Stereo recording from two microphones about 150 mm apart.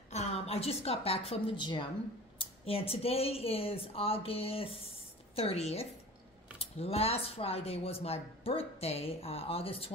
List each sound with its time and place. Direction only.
0.1 s a woman's voice: 45° left (ahead or behind)